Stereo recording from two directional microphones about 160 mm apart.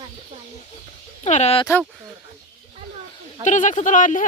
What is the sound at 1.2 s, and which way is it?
Speech, 45° left (ahead or behind).